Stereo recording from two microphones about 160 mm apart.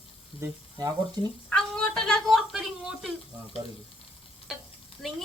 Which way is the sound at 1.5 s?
5° left (ahead or behind).